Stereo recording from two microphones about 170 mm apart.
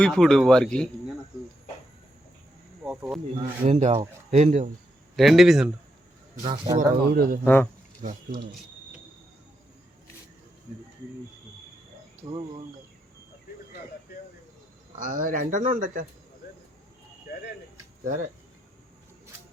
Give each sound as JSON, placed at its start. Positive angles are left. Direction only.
{"t": 0.0, "sound": "speech", "side_deg": 5}
{"t": 2.8, "sound": "a sound", "side_deg": -5}
{"t": 3.7, "sound": "speech", "side_deg": -40}
{"t": 5.1, "sound": "speech", "side_deg": 0}
{"t": 6.4, "sound": "speech", "side_deg": -30}
{"t": 6.7, "sound": "speech", "side_deg": -55}
{"t": 7.4, "sound": "speech", "side_deg": 10}
{"t": 12.2, "sound": "speech", "side_deg": -30}
{"t": 15.0, "sound": "speech", "side_deg": -50}
{"t": 18.0, "sound": "speech", "side_deg": -50}